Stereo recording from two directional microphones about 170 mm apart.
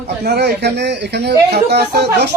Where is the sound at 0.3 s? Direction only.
75° right (ahead or behind).